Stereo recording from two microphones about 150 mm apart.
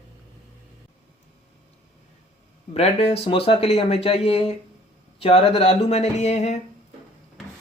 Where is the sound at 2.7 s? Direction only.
45° left (ahead or behind).